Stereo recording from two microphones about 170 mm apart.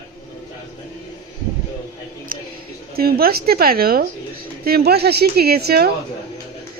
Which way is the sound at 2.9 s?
65° right (ahead or behind).